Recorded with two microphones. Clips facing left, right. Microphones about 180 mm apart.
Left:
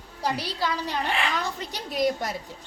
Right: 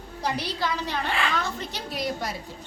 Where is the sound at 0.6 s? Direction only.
15° left (ahead or behind).